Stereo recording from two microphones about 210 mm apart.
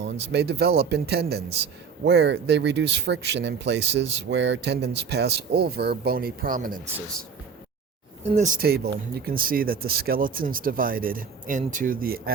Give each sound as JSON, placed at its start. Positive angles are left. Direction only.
{"t": 0.0, "sound": "speech", "side_deg": -55}
{"t": 8.3, "sound": "speech", "side_deg": -35}